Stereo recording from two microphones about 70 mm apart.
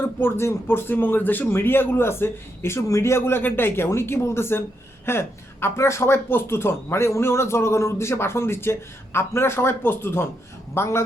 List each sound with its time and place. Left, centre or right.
0.0 s speech: left